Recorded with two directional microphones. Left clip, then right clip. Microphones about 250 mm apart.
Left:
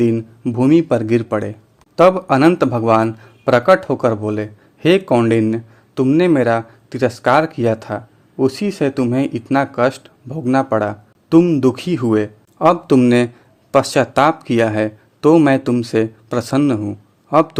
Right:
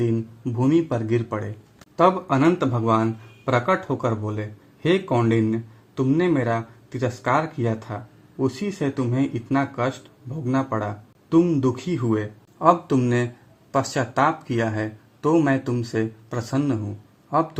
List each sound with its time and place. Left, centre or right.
0.0 s a man's voice: left